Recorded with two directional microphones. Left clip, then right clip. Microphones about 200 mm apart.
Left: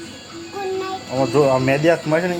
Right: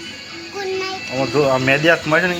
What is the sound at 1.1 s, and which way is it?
Speech, 10° right (ahead or behind).